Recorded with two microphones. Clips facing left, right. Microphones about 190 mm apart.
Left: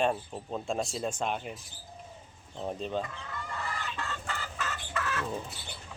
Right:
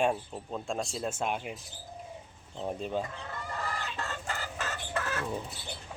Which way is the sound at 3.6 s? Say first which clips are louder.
Right 1 dB; 40° right (ahead or behind).